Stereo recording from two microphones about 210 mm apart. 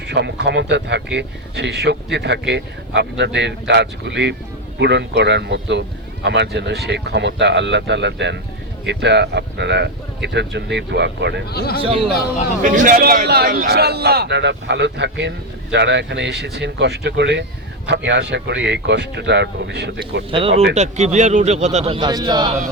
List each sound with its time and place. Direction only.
0.1 s speech: 55° right (ahead or behind)
11.5 s speech: 50° left (ahead or behind)
11.8 s speech: 25° right (ahead or behind)
12.6 s a man's voice: 40° right (ahead or behind); by 20.2 s 55° right (ahead or behind)
20.7 s speech: 35° right (ahead or behind)